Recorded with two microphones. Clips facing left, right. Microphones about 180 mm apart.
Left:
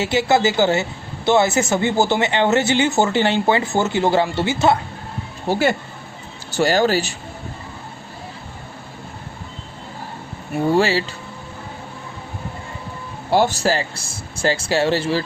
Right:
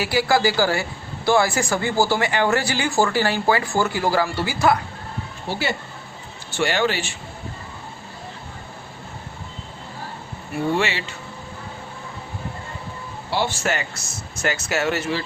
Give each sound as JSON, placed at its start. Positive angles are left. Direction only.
{"t": 0.0, "sound": "speech", "side_deg": 25}
{"t": 5.5, "sound": "speech", "side_deg": 50}
{"t": 6.5, "sound": "speech", "side_deg": 40}
{"t": 10.7, "sound": "speech", "side_deg": 35}
{"t": 13.3, "sound": "speech", "side_deg": 45}